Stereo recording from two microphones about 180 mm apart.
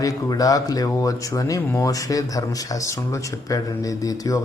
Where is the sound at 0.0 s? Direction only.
20° left (ahead or behind).